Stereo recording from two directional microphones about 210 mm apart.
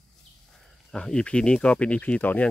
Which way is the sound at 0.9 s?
5° left (ahead or behind).